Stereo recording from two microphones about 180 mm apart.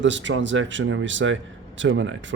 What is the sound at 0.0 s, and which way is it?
Speech, 90° right.